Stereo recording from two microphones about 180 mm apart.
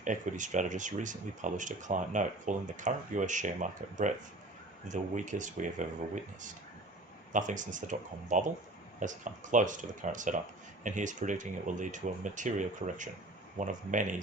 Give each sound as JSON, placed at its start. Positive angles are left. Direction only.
{"t": 0.0, "sound": "speech", "side_deg": -45}
{"t": 7.3, "sound": "speech", "side_deg": -45}